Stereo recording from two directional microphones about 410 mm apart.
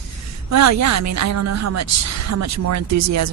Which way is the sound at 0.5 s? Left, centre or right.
Right.